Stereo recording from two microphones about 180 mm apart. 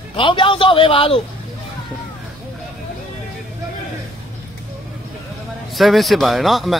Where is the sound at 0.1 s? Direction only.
30° left (ahead or behind).